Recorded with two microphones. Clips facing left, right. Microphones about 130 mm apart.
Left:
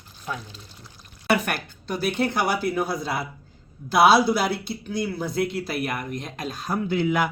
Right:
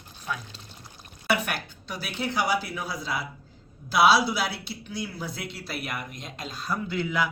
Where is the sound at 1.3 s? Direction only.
45° left (ahead or behind).